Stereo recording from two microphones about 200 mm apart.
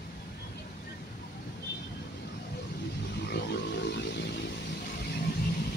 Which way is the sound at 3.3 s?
55° left (ahead or behind).